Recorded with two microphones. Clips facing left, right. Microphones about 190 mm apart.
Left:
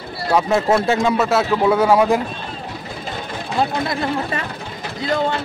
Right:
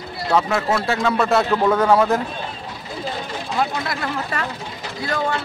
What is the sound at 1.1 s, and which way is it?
Speech, 5° left (ahead or behind).